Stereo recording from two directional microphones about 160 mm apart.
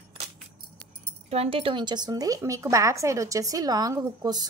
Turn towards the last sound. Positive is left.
turn(degrees=-25)  # may be behind; listen again after turning